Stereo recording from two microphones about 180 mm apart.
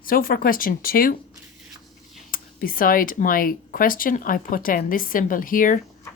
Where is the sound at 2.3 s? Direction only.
50° left (ahead or behind).